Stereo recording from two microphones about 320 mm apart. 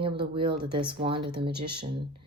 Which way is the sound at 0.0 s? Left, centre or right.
Centre.